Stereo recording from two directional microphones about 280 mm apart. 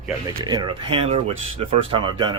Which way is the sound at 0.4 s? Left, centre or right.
Centre.